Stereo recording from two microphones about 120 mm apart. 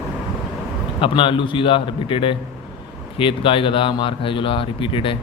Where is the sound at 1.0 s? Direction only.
45° left (ahead or behind).